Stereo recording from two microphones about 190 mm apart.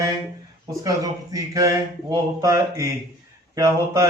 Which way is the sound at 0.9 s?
20° right (ahead or behind).